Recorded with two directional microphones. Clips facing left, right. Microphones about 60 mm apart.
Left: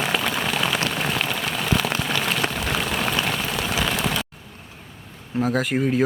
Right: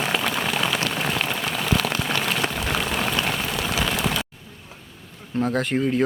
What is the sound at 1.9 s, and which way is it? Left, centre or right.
Rain on surface, left.